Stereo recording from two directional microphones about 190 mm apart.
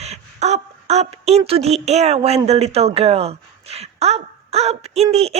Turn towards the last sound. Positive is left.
turn(degrees=-35)  # may be behind; listen again after turning